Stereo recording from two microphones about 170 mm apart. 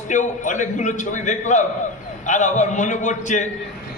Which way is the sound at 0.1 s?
45° left (ahead or behind).